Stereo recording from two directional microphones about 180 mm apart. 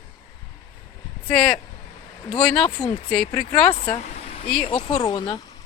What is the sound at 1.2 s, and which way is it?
Speech, 5° left (ahead or behind).